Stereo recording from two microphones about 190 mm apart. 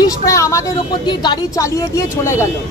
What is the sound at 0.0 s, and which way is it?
A woman's voice, 15° left (ahead or behind).